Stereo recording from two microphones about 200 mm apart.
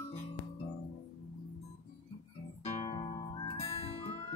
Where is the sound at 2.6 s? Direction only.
25° left (ahead or behind).